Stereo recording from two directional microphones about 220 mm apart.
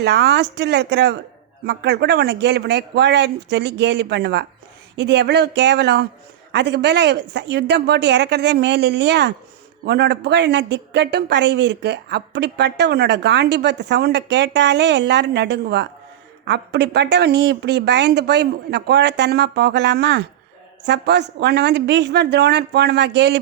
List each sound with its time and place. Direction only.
0.0 s a woman's voice: 50° right (ahead or behind)